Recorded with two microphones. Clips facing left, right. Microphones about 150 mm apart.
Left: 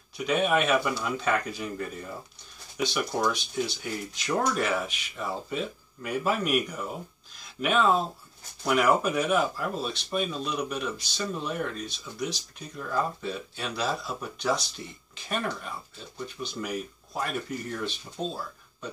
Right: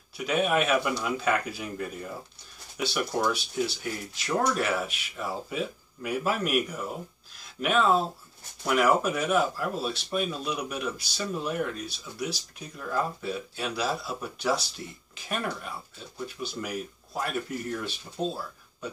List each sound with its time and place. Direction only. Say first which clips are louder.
0.2 s speech: left 1 dB; 5° right (ahead or behind)